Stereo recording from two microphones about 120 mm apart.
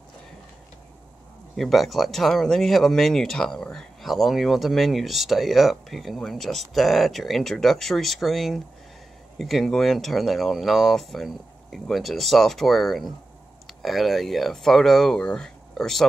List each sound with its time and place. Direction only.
1.6 s speech: centre (ahead or behind)